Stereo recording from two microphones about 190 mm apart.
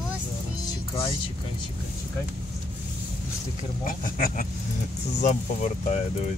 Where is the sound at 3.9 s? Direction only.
45° left (ahead or behind).